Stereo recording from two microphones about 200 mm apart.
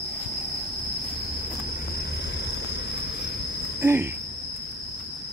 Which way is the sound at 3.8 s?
10° right (ahead or behind).